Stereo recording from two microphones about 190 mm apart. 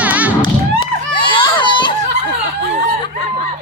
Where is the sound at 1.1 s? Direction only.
25° left (ahead or behind).